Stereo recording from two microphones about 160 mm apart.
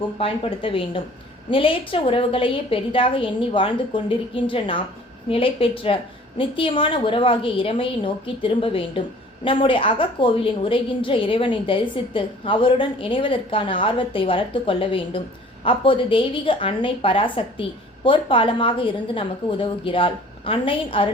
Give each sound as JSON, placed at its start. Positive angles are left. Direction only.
{"t": 0.2, "sound": "a woman's voice", "side_deg": 35}